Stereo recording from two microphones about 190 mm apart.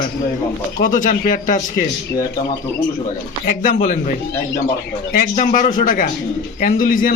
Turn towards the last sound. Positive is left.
turn(degrees=45)  # may be behind; listen again after turning